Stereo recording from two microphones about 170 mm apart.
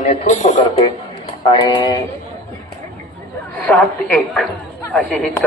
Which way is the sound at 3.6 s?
Centre (ahead or behind).